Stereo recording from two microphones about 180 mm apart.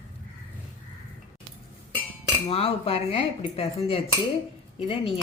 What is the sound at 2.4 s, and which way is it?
Cutlery, 35° left (ahead or behind).